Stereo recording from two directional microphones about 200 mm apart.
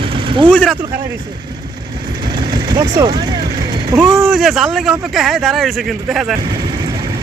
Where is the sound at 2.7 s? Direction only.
20° right (ahead or behind).